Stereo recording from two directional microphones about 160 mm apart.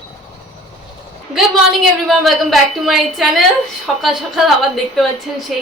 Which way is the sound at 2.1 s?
Centre (ahead or behind).